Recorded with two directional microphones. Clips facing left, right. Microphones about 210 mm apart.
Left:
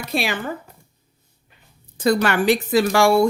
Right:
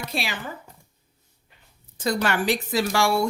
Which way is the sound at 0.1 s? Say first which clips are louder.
Left 9 dB; 55° left (ahead or behind).